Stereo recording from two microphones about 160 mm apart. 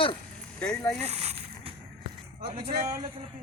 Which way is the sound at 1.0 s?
40° right (ahead or behind).